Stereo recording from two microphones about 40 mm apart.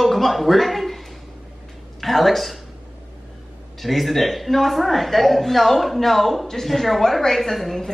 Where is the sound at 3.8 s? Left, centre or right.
Centre.